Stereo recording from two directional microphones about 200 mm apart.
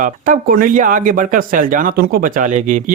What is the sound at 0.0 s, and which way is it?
Speech, 45° right (ahead or behind).